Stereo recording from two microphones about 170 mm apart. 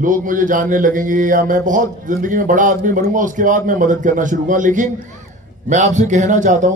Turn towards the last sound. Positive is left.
turn(degrees=-45)  # may be behind; listen again after turning